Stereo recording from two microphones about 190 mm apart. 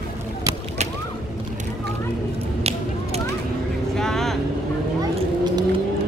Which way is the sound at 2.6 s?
35° right (ahead or behind).